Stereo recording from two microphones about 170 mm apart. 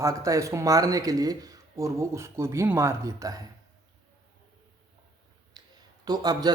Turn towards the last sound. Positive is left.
turn(degrees=-25)  # may be behind; listen again after turning